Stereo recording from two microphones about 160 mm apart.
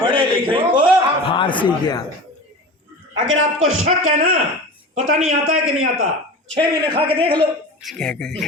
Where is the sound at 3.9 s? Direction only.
65° right (ahead or behind).